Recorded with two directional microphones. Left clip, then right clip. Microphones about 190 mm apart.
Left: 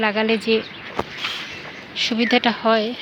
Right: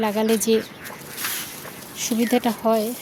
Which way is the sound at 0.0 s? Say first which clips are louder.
Left 2 dB; 25° right (ahead or behind).